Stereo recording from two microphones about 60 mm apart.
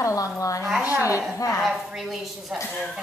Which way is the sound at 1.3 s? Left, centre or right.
Left.